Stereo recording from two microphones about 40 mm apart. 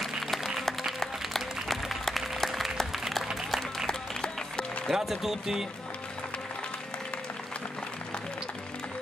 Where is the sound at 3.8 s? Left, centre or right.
Left.